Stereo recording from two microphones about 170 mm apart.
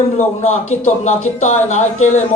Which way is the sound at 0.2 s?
45° left (ahead or behind).